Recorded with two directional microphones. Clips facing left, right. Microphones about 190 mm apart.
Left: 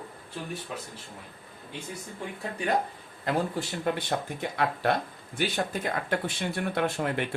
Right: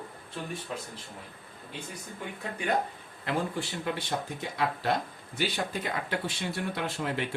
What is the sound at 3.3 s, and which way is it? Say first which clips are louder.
Speech: left 3 dB; 50° left (ahead or behind).